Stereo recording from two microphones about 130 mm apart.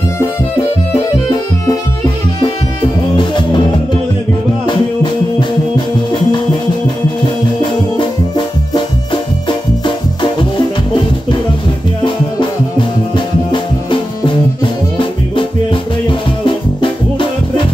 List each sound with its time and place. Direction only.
3.2 s music: 35° left (ahead or behind)
4.6 s music: 35° left (ahead or behind)
9.1 s music: 35° left (ahead or behind)
13.1 s music: 35° left (ahead or behind)